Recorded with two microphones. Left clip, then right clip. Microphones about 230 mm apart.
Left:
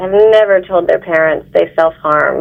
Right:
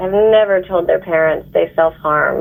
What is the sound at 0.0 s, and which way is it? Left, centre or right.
Speech, left.